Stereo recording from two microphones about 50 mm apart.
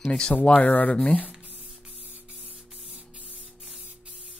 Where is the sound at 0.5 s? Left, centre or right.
Left.